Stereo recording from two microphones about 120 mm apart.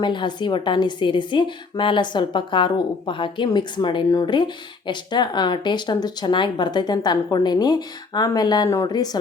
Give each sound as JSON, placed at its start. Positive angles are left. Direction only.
{"t": 0.0, "sound": "a woman's voice", "side_deg": 40}